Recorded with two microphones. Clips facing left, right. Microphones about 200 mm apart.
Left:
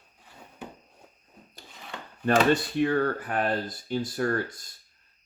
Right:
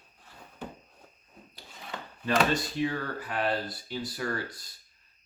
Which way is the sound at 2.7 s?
60° left (ahead or behind).